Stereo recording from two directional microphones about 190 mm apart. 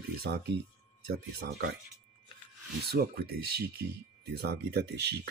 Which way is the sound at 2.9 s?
55° right (ahead or behind).